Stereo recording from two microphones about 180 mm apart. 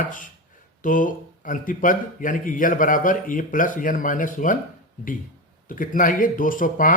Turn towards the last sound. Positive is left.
turn(degrees=50)  # may be behind; listen again after turning